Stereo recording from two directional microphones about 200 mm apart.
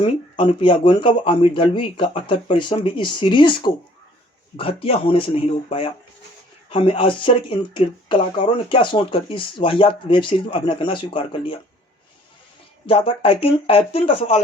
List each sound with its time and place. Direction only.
0.0 s speech: 25° left (ahead or behind)
12.8 s speech: 25° left (ahead or behind)